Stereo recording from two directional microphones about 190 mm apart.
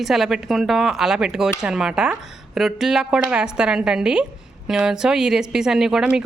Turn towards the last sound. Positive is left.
turn(degrees=-5)  # may be behind; listen again after turning